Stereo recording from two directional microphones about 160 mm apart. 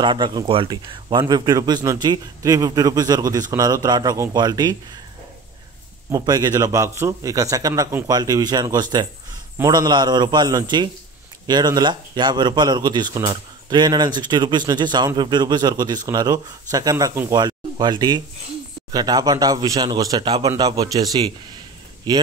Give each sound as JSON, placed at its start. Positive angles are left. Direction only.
{"t": 0.0, "sound": "a man's voice", "side_deg": -30}
{"t": 6.1, "sound": "a man's voice", "side_deg": -25}